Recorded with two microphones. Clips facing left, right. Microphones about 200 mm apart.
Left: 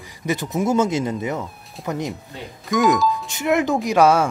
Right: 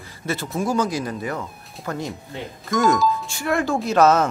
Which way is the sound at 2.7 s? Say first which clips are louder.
Left 1 dB; centre (ahead or behind).